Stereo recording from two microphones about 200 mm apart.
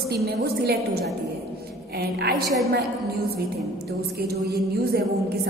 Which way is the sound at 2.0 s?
55° right (ahead or behind).